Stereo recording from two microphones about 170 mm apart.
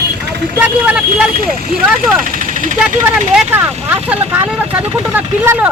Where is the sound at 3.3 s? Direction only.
10° right (ahead or behind).